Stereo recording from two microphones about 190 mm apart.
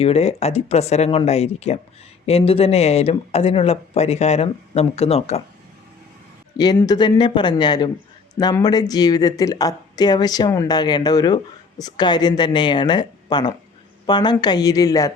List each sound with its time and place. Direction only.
0.0 s speech: 30° left (ahead or behind)
6.7 s speech: 20° left (ahead or behind)